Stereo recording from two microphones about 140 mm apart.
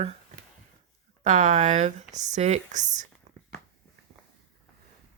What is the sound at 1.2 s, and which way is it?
Speech, 60° right (ahead or behind).